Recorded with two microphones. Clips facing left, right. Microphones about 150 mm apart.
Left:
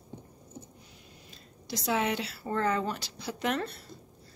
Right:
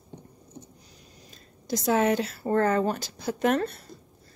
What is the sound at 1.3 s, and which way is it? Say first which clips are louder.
Speech: right 8 dB; 45° right (ahead or behind).